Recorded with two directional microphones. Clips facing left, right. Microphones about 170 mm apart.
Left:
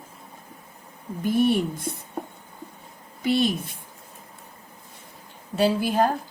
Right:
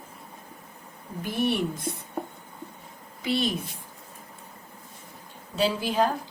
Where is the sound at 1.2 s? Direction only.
50° left (ahead or behind).